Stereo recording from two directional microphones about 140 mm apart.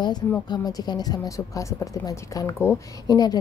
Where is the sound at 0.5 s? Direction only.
30° left (ahead or behind).